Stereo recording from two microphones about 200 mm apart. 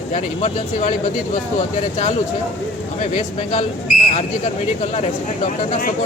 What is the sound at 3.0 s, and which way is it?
Speech, 35° left (ahead or behind).